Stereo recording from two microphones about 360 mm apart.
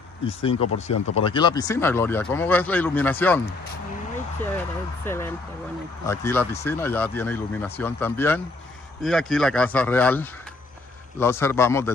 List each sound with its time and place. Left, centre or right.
0.3 s speech: centre
0.6 s speech: left
1.1 s speech: centre
5.0 s speech: centre